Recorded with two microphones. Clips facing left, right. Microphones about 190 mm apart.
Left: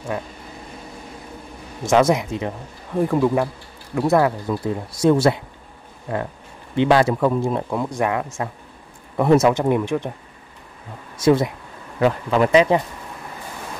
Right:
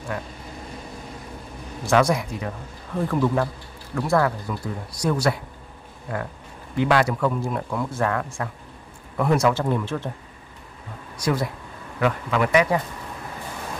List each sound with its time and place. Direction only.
1.8 s speech: 20° left (ahead or behind)
6.7 s speech: 25° left (ahead or behind)
11.1 s speech: 25° left (ahead or behind)